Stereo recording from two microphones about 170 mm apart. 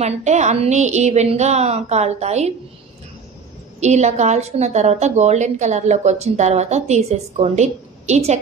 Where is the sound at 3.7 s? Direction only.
40° right (ahead or behind).